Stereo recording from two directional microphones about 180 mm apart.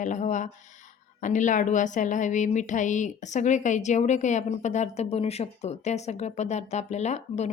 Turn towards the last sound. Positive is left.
turn(degrees=40)  # may be behind; listen again after turning